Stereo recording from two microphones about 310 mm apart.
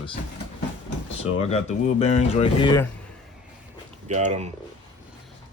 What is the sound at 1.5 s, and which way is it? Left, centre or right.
Speech, left.